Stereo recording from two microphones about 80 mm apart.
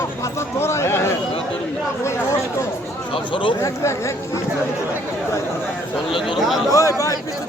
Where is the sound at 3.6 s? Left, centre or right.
Left.